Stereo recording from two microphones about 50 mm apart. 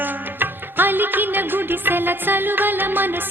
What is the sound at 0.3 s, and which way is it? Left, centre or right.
Music, right.